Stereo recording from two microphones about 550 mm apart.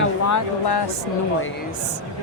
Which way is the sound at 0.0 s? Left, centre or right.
Left.